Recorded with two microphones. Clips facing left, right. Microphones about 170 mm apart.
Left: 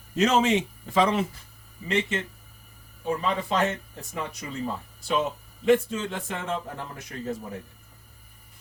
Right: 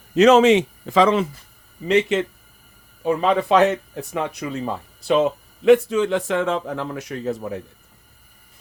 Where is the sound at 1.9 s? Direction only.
80° right.